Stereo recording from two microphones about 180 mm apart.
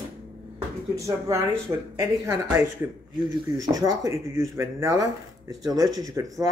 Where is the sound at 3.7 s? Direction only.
20° right (ahead or behind).